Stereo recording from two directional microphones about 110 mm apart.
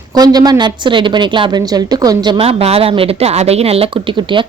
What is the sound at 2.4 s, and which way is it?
Speech, 65° right (ahead or behind).